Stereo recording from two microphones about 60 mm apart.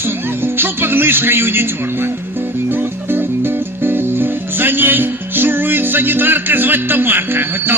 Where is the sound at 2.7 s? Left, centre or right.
Right.